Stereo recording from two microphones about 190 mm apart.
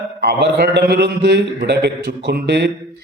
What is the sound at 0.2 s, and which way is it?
A man's voice, 60° right (ahead or behind).